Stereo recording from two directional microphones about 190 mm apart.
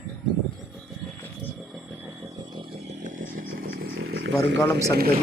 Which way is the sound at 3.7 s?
80° right.